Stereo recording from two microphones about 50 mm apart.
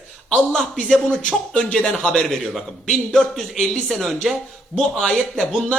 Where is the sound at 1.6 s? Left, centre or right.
Centre.